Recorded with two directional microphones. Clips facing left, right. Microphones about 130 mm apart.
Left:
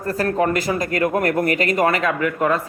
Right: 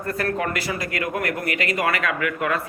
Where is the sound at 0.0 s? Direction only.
35° left (ahead or behind).